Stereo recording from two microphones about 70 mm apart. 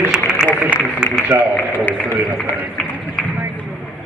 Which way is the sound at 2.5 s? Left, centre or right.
Left.